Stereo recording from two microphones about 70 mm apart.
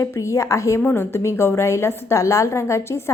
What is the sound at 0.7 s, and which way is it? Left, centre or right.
A woman's voice, left.